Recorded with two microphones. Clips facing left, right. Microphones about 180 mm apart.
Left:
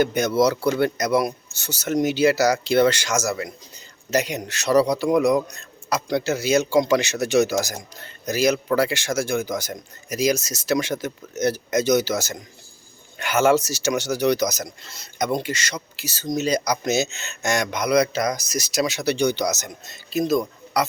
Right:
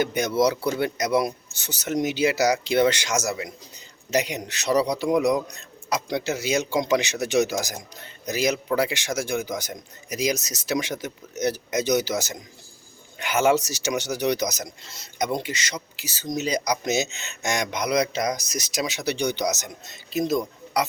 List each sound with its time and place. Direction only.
0.2 s a man's voice: 15° right (ahead or behind)